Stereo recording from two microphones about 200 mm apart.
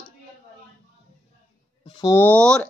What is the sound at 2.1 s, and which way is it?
Speech, 10° left (ahead or behind).